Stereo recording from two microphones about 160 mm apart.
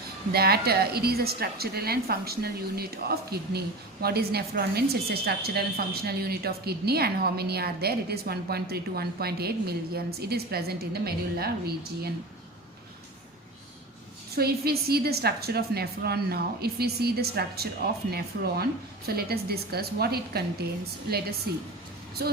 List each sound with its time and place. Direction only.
0.3 s a woman's voice: 80° right
14.3 s a woman's voice: 75° right (ahead or behind)